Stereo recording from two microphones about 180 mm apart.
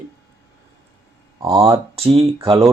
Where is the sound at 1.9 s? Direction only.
30° right (ahead or behind).